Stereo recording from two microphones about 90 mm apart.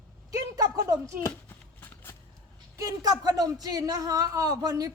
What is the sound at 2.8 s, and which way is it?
A woman's voice, 45° right (ahead or behind).